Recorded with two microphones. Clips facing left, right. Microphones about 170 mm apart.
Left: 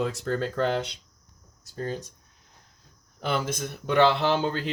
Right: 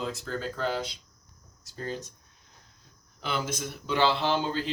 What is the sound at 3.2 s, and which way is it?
Mantra, 50° left (ahead or behind).